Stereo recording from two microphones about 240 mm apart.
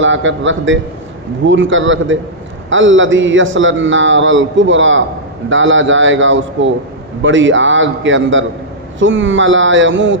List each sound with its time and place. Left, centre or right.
0.0 s a man's voice: right